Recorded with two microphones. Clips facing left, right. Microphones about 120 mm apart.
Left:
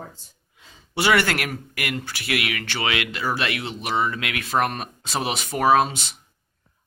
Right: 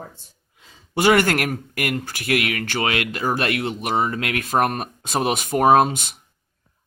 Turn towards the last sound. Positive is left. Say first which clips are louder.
# right 3 dB
turn(degrees=-50)  # may be behind; listen again after turning